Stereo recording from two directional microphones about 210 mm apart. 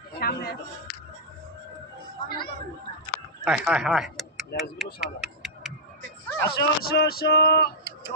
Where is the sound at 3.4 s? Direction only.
5° right (ahead or behind).